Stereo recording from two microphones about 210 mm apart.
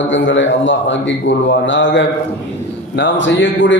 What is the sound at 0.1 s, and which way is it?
A man's voice, 60° left (ahead or behind).